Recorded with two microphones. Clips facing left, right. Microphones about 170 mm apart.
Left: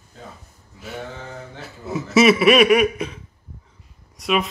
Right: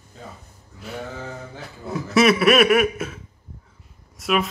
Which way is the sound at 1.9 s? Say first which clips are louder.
Left 2 dB; 5° left (ahead or behind).